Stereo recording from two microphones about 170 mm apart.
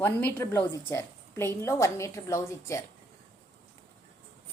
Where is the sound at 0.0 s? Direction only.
10° left (ahead or behind).